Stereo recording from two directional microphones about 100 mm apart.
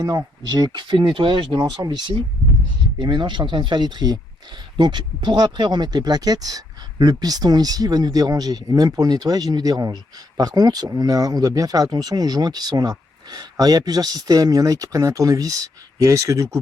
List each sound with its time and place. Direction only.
0.0 s speech: 35° right (ahead or behind)